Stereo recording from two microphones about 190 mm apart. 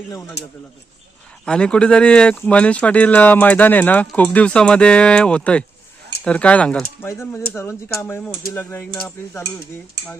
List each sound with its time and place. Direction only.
0.4 s speech: 65° left (ahead or behind)
1.5 s speech: 5° left (ahead or behind)